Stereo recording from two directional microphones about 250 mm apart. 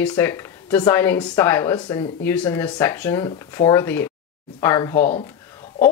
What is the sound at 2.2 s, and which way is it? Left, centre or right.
Speech, centre.